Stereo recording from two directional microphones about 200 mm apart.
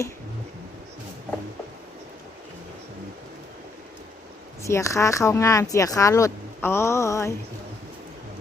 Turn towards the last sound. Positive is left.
turn(degrees=15)  # may be behind; listen again after turning